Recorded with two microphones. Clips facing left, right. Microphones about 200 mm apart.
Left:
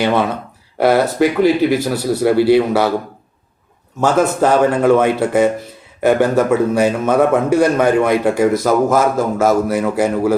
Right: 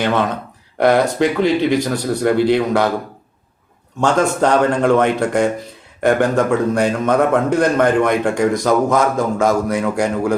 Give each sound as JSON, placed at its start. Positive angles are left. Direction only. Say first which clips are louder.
{"t": 0.0, "sound": "speech", "louder": "left 2 dB", "side_deg": 10}
{"t": 4.0, "sound": "a man's voice", "louder": "left 1 dB", "side_deg": 5}